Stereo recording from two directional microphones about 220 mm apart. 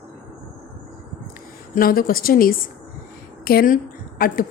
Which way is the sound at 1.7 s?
40° left (ahead or behind).